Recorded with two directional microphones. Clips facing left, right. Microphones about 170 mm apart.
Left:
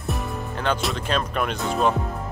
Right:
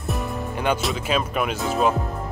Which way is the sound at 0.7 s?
5° right (ahead or behind).